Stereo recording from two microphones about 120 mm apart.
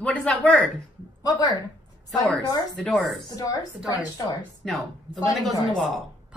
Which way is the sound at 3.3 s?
30° left (ahead or behind).